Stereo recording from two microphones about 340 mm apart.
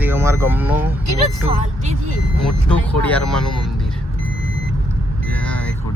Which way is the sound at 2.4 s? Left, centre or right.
Centre.